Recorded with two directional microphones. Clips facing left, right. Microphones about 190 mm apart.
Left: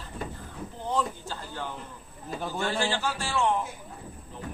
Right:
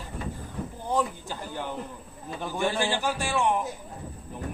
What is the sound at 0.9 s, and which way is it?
A man's voice, 15° right (ahead or behind).